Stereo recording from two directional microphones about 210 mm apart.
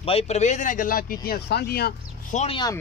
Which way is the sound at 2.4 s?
25° left (ahead or behind).